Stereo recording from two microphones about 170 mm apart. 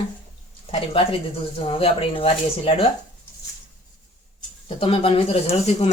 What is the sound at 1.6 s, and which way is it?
Speech, 35° left (ahead or behind).